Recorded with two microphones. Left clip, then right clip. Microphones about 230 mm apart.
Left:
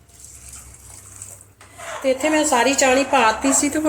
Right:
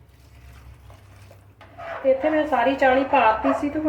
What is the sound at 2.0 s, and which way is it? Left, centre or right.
A woman's voice, left.